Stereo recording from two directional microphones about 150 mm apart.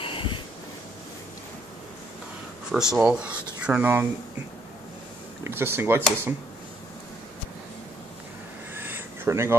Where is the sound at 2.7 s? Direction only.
5° right (ahead or behind).